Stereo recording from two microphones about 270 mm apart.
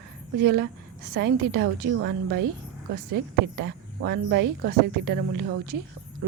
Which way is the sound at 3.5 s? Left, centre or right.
Right.